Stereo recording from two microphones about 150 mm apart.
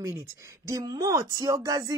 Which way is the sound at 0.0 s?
20° right (ahead or behind).